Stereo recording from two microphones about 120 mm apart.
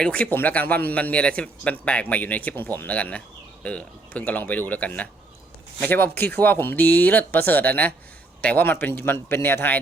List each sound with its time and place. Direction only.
0.0 s a man's voice: 10° left (ahead or behind)